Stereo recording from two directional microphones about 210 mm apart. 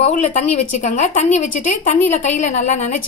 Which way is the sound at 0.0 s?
30° left (ahead or behind).